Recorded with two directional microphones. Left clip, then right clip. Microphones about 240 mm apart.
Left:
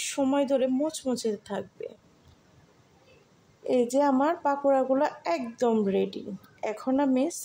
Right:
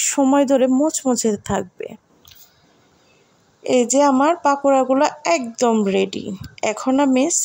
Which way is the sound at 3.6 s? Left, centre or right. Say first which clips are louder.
Right 9 dB; centre.